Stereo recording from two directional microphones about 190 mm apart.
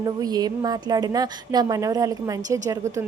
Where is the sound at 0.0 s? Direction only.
20° right (ahead or behind).